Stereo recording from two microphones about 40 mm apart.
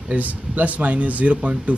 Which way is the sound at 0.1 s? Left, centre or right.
Right.